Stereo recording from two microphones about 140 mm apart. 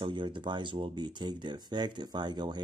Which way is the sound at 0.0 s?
35° right (ahead or behind).